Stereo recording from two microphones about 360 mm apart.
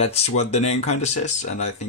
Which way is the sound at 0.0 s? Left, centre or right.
Centre.